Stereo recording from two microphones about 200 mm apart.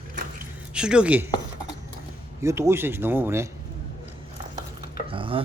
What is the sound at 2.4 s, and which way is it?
Speech, 15° right (ahead or behind).